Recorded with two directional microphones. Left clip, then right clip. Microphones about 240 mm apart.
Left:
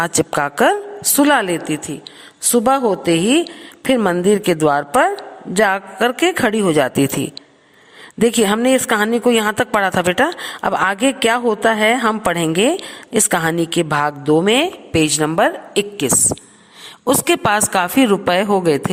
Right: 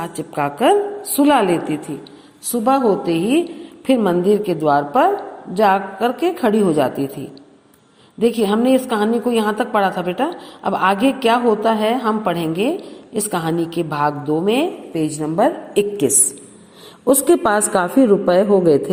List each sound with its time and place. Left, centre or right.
0.0 s a woman's voice: left
8.2 s a woman's voice: left
15.4 s a woman's voice: left
16.0 s a woman's voice: left
17.1 s a woman's voice: left